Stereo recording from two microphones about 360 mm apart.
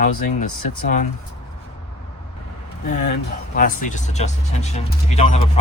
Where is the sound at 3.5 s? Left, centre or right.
Left.